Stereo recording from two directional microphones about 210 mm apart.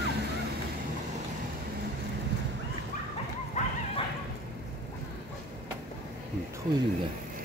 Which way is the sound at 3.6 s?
35° left (ahead or behind).